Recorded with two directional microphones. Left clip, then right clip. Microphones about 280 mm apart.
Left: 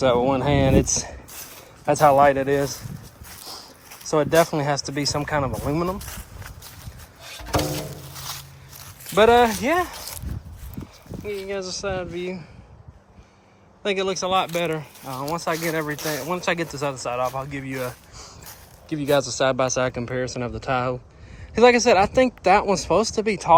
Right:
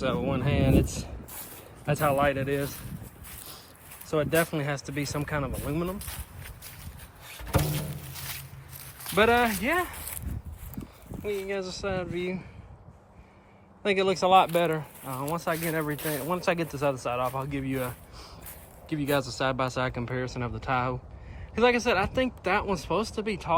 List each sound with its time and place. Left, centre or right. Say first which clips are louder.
0.0 s speech: left 10 dB; centre
3.4 s a sound: left 11 dB; left
4.1 s speech: left 8 dB; left
8.1 s a sound: left 4 dB; centre
9.1 s speech: left 7 dB; centre
11.4 s speech: left 4 dB; centre
13.8 s speech: left 1 dB; centre
16.0 s speech: left 5 dB; centre
16.2 s speech: left 2 dB; centre